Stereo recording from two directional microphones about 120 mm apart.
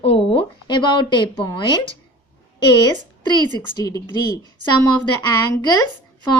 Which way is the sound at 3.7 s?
30° left (ahead or behind).